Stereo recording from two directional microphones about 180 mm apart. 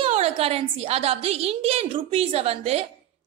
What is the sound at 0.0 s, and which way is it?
A woman's voice, 35° right (ahead or behind).